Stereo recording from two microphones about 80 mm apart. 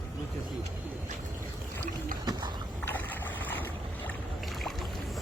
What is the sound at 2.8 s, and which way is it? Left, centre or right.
Boat, left.